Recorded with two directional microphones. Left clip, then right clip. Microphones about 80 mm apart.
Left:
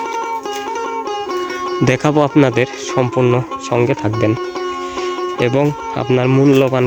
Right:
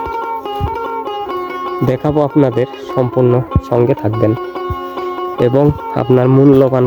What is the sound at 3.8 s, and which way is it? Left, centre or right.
Speech, right.